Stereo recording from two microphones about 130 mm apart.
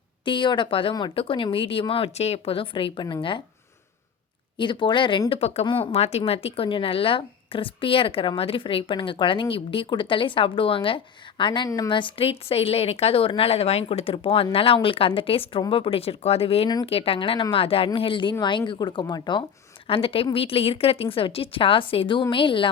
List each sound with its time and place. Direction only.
0.3 s speech: 40° left (ahead or behind)
4.5 s speech: 40° left (ahead or behind)
5.3 s speech: 55° left (ahead or behind); by 19.4 s 35° left (ahead or behind)
19.9 s speech: 45° left (ahead or behind)